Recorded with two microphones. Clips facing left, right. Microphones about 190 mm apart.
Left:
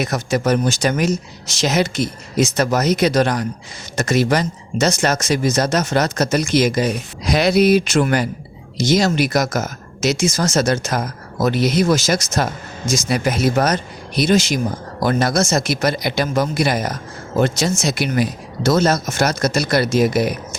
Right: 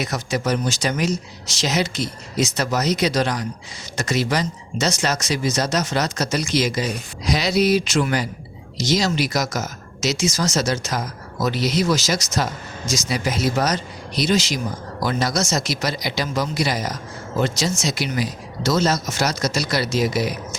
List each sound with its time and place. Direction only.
0.0 s speech: 50° left (ahead or behind)